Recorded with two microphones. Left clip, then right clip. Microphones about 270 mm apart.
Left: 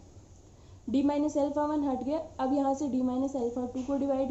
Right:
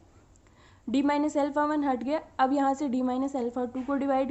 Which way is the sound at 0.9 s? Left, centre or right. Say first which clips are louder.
Right 2 dB; right.